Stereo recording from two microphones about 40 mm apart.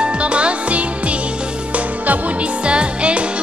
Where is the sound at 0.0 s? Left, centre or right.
Right.